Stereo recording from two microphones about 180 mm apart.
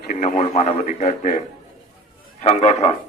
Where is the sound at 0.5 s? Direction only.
40° left (ahead or behind).